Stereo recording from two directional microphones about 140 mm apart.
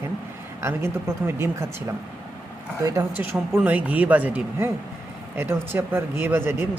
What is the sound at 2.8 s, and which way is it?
Speech, 25° right (ahead or behind).